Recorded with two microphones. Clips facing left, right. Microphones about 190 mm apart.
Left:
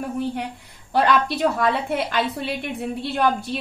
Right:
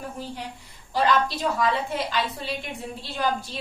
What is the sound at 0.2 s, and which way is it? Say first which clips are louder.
A woman's voice: left 8 dB; 60° left (ahead or behind).